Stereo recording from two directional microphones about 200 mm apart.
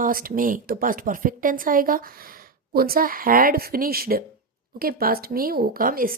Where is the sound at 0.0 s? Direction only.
45° right (ahead or behind).